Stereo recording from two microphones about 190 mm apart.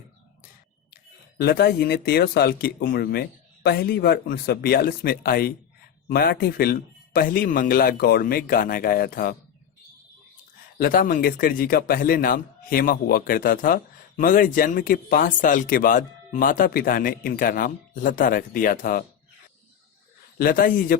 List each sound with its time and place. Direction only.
1.4 s speech: 55° left (ahead or behind)
10.8 s speech: 45° left (ahead or behind)
20.4 s speech: 50° left (ahead or behind)